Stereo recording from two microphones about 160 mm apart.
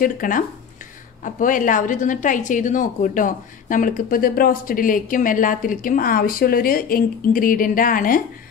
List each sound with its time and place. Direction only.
0.0 s a woman's voice: 60° left (ahead or behind)